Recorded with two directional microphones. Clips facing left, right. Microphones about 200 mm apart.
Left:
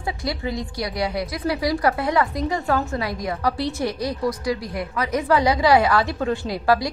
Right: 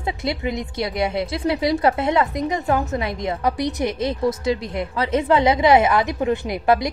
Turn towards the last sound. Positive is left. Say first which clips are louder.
# right 1 dB
turn(degrees=-20)  # may be behind; listen again after turning